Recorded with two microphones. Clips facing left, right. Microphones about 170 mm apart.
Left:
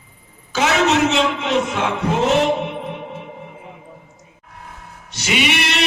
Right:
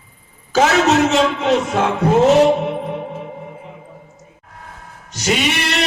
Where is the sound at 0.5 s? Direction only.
40° right (ahead or behind).